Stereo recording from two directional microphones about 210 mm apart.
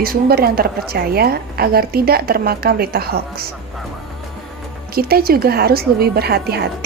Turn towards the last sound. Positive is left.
turn(degrees=-50)  # may be behind; listen again after turning